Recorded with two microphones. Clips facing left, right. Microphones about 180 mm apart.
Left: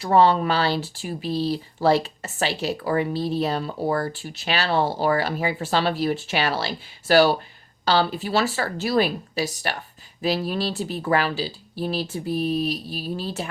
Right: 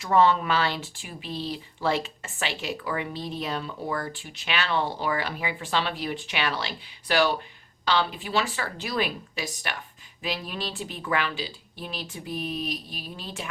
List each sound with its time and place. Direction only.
0.0 s speech: 35° left (ahead or behind)